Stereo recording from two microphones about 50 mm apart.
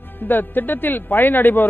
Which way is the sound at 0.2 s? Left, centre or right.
Left.